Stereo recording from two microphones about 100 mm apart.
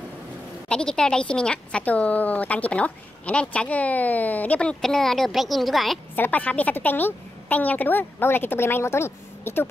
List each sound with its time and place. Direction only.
0.7 s a woman's voice: 10° left (ahead or behind)
6.1 s a woman's voice: 15° left (ahead or behind)